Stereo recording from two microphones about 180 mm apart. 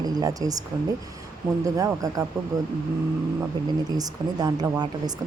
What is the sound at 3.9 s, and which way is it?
Speech, 20° right (ahead or behind).